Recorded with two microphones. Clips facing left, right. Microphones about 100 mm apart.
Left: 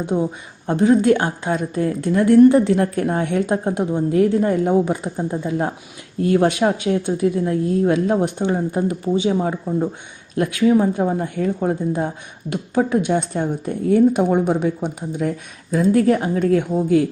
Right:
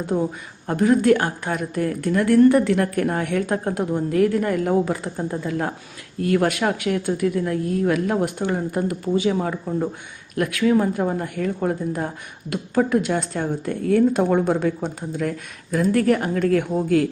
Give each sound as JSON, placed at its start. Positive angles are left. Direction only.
{"t": 0.0, "sound": "a woman's voice", "side_deg": 20}